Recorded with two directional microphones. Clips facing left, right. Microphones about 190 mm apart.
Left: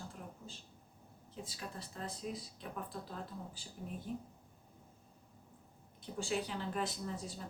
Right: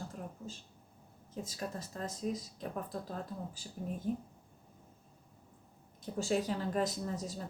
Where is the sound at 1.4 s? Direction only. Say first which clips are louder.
Right 7 dB; 45° right (ahead or behind).